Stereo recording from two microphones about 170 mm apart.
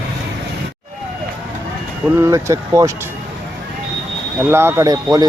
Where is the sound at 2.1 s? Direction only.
15° right (ahead or behind).